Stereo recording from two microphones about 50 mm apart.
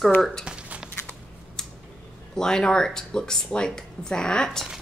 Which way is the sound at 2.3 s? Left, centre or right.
Centre.